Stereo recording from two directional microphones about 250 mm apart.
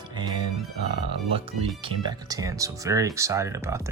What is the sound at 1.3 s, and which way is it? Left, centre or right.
Speech, right.